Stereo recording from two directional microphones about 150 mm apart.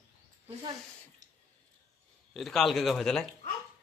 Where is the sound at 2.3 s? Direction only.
Centre (ahead or behind).